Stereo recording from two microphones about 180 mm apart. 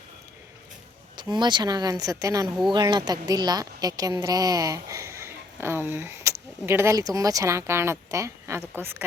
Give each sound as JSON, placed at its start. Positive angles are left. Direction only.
{"t": 1.1, "sound": "a woman's voice", "side_deg": -25}